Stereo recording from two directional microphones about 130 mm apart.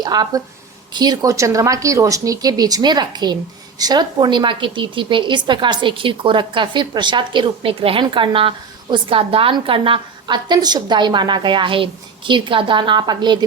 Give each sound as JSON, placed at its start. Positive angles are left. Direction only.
{"t": 0.0, "sound": "a woman's voice", "side_deg": -30}